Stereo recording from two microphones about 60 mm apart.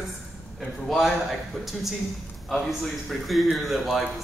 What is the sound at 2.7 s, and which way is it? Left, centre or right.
Speech, centre.